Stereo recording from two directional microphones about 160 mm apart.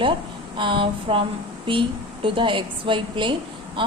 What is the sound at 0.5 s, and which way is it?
Speech, 30° right (ahead or behind).